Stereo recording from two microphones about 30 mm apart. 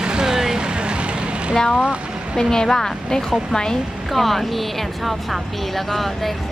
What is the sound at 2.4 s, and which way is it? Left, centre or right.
Speech, centre.